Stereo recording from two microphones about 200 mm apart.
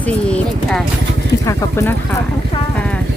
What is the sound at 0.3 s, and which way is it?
A woman's voice, 5° left (ahead or behind).